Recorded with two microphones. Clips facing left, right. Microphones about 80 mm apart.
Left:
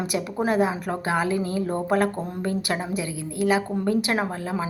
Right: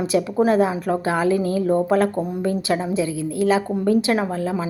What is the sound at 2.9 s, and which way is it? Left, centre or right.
Speech, right.